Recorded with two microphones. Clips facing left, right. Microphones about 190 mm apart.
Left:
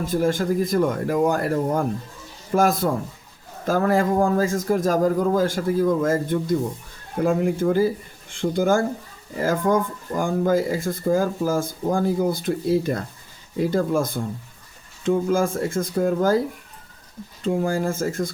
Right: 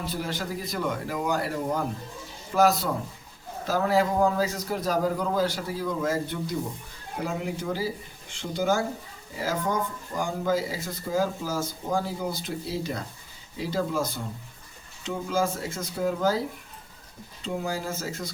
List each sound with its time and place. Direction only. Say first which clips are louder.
0.0 s speech: left 10 dB; 45° left (ahead or behind)
17.4 s speech: left 8 dB; 50° left (ahead or behind)